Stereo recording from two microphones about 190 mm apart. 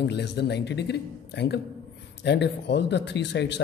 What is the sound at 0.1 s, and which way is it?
Speech, 60° left (ahead or behind).